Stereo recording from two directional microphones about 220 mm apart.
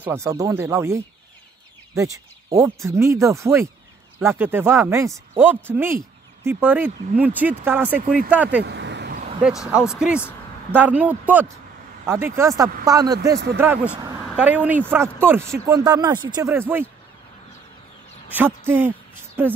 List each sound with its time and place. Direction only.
0.0 s speech: 10° right (ahead or behind)
8.0 s speech: 40° right (ahead or behind)
8.3 s speech: 5° right (ahead or behind)
8.6 s vehicle: 50° right (ahead or behind)
9.4 s speech: 5° right (ahead or behind)
18.3 s speech: 10° right (ahead or behind)